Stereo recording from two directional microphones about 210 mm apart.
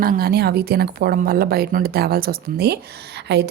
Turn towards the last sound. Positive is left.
turn(degrees=-50)  # may be behind; listen again after turning